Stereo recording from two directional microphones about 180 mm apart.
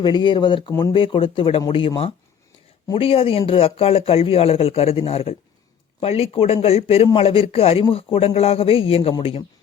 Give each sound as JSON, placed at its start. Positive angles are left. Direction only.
{"t": 0.0, "sound": "speech", "side_deg": 25}